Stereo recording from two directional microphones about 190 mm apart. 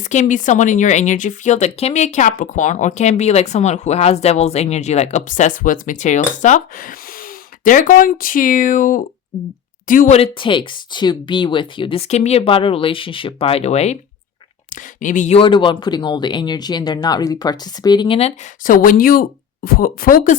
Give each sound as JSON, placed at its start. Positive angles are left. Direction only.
{"t": 0.1, "sound": "a woman's voice", "side_deg": 40}
{"t": 10.3, "sound": "speech", "side_deg": 25}
{"t": 15.0, "sound": "speech", "side_deg": 40}
{"t": 18.6, "sound": "speech", "side_deg": 45}